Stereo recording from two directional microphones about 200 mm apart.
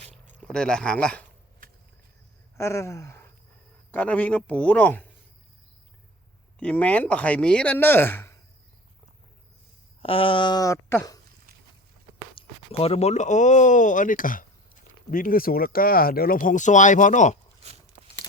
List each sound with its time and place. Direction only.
0.3 s speech: 5° left (ahead or behind)
2.6 s speech: 15° left (ahead or behind)
6.6 s speech: 5° left (ahead or behind)
10.0 s speech: 25° left (ahead or behind)
12.3 s speech: 25° left (ahead or behind)